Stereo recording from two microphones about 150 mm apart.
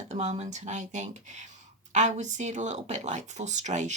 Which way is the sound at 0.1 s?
50° right (ahead or behind).